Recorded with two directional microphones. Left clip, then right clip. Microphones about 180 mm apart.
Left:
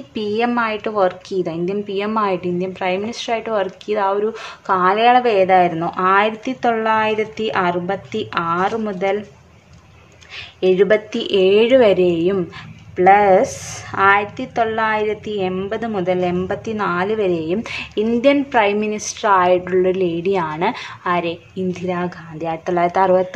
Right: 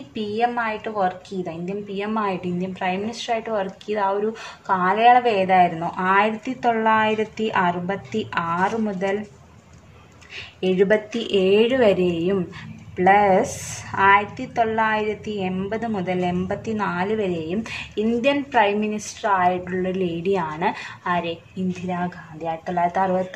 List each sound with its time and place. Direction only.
0.1 s a woman's voice: 35° left (ahead or behind)
10.6 s a woman's voice: 20° left (ahead or behind); by 19.9 s 35° left (ahead or behind)
19.9 s a woman's voice: 20° left (ahead or behind)